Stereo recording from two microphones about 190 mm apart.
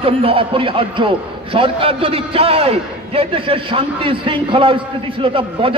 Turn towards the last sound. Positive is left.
turn(degrees=-30)  # may be behind; listen again after turning